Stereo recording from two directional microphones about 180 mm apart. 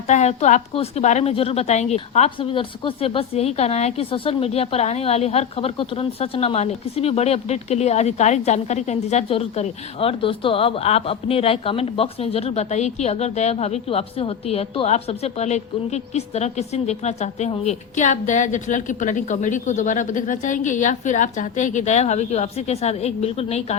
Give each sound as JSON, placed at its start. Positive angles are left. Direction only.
{"t": 0.1, "sound": "a woman's voice", "side_deg": 40}